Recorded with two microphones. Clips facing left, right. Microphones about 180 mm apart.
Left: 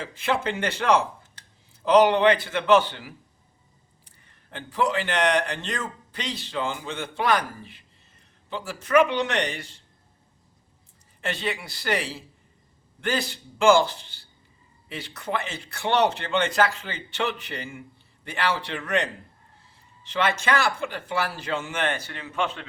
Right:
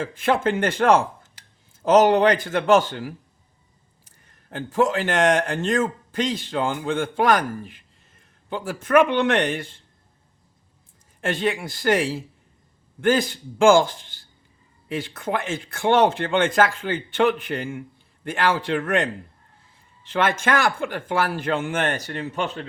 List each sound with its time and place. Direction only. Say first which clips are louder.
0.0 s a man's voice: right 5 dB; 50° right (ahead or behind)
11.2 s speech: right 6 dB; 50° right (ahead or behind)